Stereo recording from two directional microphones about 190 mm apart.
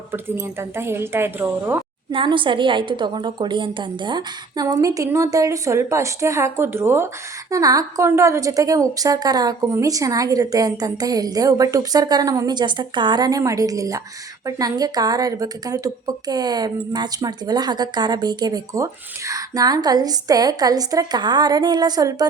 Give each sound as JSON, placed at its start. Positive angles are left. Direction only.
{"t": 0.1, "sound": "a woman's voice", "side_deg": -10}
{"t": 2.1, "sound": "a woman's voice", "side_deg": -25}